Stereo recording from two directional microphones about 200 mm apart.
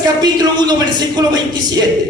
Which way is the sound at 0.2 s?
20° right (ahead or behind).